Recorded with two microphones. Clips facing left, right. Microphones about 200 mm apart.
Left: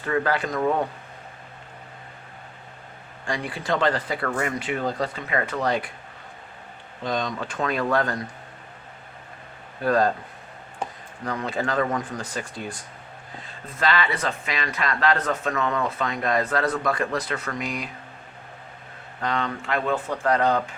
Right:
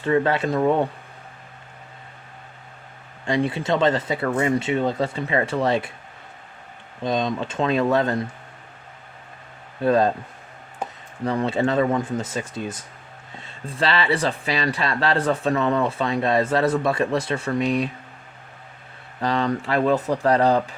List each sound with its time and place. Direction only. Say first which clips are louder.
0.0 s speech: right 4 dB; 25° right (ahead or behind)
3.2 s speech: right 5 dB; 25° right (ahead or behind)
7.0 s speech: right 4 dB; 20° right (ahead or behind)
9.8 s speech: right 3 dB; 25° right (ahead or behind)
11.3 s speech: right 6 dB; 25° right (ahead or behind)
19.2 s speech: right 5 dB; 35° right (ahead or behind)